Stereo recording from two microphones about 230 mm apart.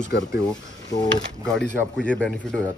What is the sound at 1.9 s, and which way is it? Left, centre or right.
Speech, centre.